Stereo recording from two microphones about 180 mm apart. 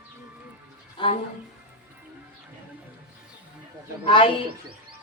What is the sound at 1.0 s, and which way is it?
Speech, 30° left (ahead or behind).